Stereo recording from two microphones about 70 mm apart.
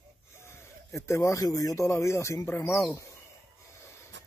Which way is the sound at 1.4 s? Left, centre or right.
Left.